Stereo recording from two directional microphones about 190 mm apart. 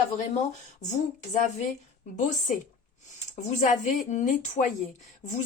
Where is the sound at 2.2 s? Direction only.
40° left (ahead or behind).